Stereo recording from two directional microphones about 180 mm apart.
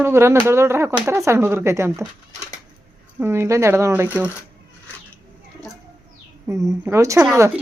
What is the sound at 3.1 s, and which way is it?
A woman's voice, 15° right (ahead or behind).